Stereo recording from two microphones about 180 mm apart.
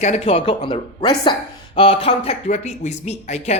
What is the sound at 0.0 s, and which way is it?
Speech, 35° left (ahead or behind).